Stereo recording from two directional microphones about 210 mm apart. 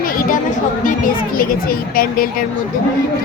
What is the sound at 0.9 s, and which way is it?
Speech, 40° left (ahead or behind).